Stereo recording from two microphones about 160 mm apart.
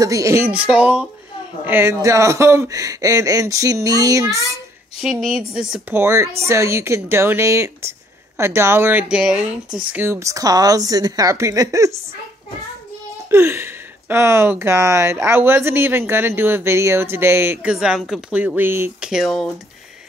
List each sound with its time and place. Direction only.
0.0 s speech: 20° right (ahead or behind)
0.5 s speech: 5° right (ahead or behind)
5.0 s speech: centre (ahead or behind)
5.9 s speech: 15° right (ahead or behind)
9.9 s speech: 15° right (ahead or behind)
13.3 s speech: 15° right (ahead or behind); by 19.5 s centre (ahead or behind)